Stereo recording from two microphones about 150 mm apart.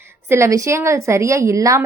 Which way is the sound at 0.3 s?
20° right (ahead or behind).